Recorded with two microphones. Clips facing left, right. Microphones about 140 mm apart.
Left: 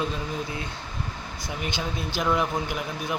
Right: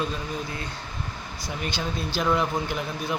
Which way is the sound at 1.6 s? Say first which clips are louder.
Right 1 dB; 20° left (ahead or behind).